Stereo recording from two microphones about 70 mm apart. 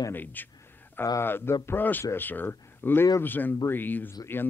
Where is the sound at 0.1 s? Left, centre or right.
Left.